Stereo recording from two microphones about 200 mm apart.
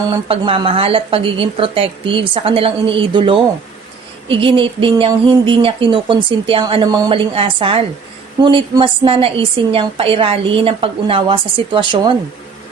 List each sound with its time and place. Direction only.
0.3 s a woman's voice: 25° right (ahead or behind)